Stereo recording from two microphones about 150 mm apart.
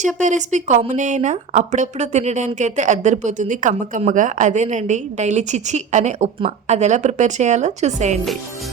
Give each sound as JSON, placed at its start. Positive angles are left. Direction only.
{"t": 0.2, "sound": "a woman's voice", "side_deg": -55}